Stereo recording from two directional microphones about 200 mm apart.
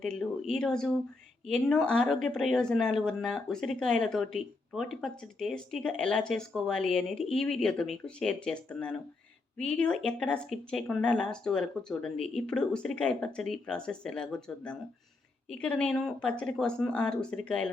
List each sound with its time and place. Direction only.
0.0 s speech: 5° left (ahead or behind)